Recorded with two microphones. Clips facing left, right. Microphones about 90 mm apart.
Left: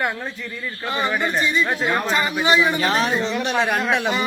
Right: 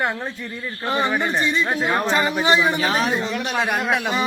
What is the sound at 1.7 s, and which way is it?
Speech, 5° right (ahead or behind).